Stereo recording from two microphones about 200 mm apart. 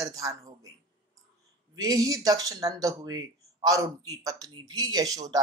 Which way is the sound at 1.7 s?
20° right (ahead or behind).